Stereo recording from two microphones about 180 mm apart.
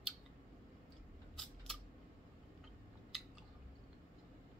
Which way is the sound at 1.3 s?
Centre (ahead or behind).